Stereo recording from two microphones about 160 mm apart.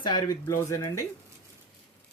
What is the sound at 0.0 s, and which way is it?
Speech, 25° left (ahead or behind).